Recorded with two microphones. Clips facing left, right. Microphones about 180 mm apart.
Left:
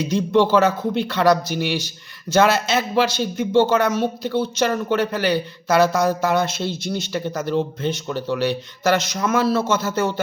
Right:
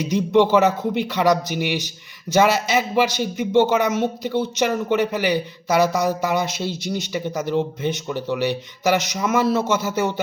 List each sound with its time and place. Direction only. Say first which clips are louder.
0.0 s speech: right 1 dB; 15° right (ahead or behind)